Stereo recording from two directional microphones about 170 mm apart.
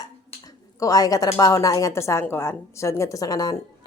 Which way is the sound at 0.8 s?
20° left (ahead or behind).